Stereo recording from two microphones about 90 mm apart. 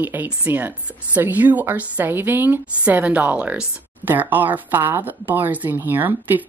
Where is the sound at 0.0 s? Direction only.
25° right (ahead or behind).